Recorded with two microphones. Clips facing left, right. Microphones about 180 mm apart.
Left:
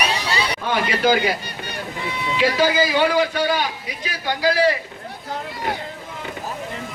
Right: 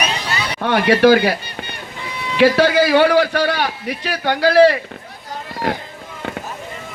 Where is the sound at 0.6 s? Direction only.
70° right (ahead or behind).